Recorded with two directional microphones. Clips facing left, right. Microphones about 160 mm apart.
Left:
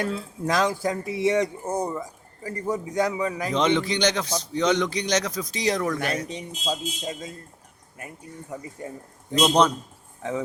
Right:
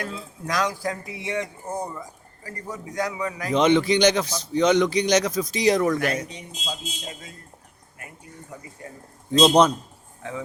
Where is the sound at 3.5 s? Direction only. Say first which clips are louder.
Right 6 dB; 10° right (ahead or behind).